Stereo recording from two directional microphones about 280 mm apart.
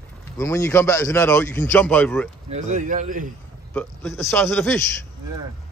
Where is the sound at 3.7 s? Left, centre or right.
Centre.